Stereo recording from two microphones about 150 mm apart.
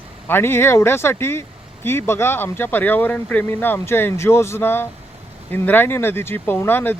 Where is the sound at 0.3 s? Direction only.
15° left (ahead or behind).